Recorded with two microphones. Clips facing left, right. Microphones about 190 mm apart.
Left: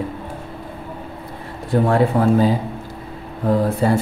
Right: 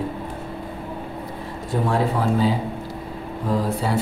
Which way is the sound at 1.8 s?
55° left (ahead or behind).